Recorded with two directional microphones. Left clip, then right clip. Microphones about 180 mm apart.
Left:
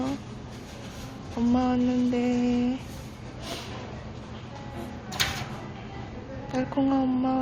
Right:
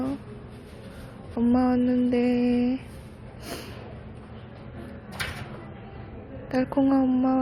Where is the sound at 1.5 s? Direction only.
20° right (ahead or behind).